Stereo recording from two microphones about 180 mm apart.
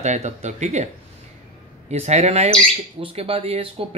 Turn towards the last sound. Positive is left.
turn(degrees=-30)  # may be behind; listen again after turning